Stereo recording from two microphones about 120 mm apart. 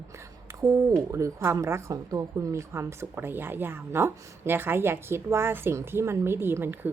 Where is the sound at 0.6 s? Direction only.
25° right (ahead or behind).